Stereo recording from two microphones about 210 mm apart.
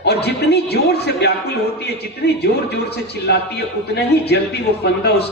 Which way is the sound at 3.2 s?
50° left (ahead or behind).